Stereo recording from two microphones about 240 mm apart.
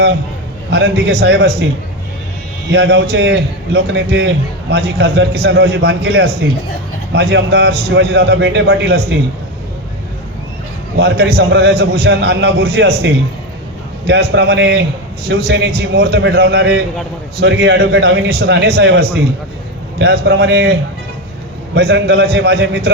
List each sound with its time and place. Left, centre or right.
0.7 s a man's voice: right
2.6 s a man's voice: right
10.9 s a man's voice: right
14.1 s a man's voice: right
21.8 s a man's voice: right